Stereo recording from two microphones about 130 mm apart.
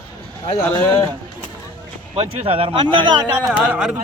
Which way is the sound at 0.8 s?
15° left (ahead or behind).